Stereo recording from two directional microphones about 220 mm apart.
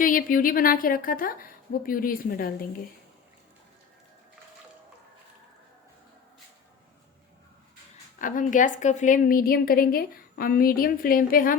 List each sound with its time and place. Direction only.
0.0 s a woman's voice: 40° left (ahead or behind)
8.2 s a woman's voice: 35° left (ahead or behind)